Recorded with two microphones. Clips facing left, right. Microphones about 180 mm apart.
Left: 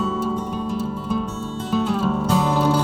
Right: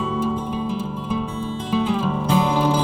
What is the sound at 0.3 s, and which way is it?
Music, 10° right (ahead or behind).